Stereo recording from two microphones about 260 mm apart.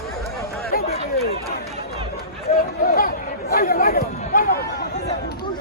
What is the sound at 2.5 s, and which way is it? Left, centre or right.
Chatter, left.